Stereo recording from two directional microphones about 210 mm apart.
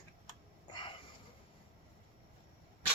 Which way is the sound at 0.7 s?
25° left (ahead or behind).